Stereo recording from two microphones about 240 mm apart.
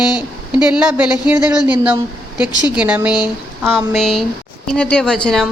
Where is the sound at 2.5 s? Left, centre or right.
Centre.